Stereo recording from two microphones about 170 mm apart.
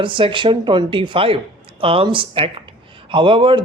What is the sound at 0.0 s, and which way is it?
Speech, 30° right (ahead or behind).